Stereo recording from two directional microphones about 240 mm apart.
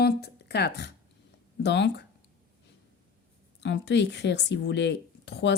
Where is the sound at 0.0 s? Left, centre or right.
Left.